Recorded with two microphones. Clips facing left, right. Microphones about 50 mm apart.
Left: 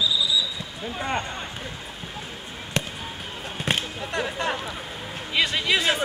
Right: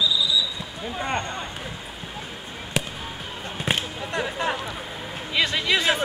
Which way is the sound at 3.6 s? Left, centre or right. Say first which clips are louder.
Even; centre.